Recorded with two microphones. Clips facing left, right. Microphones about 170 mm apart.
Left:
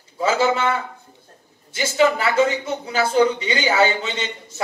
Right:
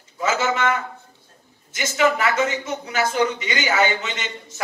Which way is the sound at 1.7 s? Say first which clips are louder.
Left 2 dB; 30° left (ahead or behind).